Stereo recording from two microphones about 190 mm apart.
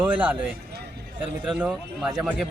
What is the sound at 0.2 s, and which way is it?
A man's voice, 10° right (ahead or behind).